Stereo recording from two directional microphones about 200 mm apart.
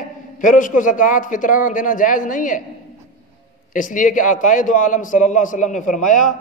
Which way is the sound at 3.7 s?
40° left (ahead or behind).